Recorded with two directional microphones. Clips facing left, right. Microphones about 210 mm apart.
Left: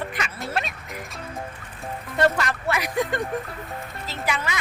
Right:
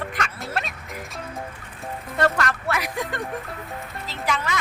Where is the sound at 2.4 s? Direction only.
Centre (ahead or behind).